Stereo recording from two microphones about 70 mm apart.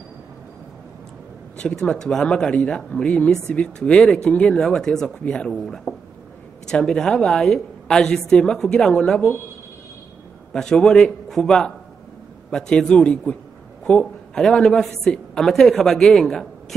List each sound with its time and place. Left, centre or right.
1.8 s speech: centre
6.7 s speech: centre
10.5 s speech: centre